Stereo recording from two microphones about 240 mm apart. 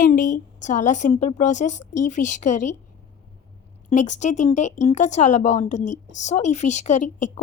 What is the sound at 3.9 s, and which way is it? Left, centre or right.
A woman's voice, left.